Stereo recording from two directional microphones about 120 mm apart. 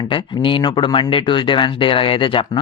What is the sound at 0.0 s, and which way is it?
Speech, 40° left (ahead or behind).